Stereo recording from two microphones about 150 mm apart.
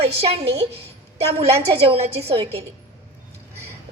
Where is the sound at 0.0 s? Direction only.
40° right (ahead or behind).